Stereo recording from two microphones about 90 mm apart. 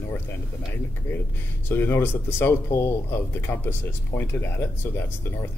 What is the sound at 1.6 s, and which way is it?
Speech, 25° left (ahead or behind).